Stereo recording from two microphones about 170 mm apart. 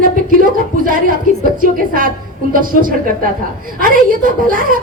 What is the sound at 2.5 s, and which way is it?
A woman's voice, 55° right (ahead or behind).